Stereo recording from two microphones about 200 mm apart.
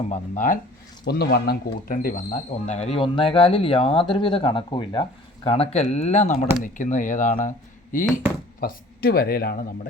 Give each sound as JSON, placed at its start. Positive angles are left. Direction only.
{"t": 0.1, "sound": "speech", "side_deg": 40}
{"t": 1.0, "sound": "speech", "side_deg": 55}
{"t": 8.6, "sound": "speech", "side_deg": 50}